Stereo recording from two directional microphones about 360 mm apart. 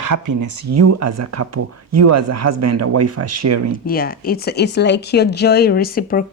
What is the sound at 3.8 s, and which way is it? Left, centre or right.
Speech, left.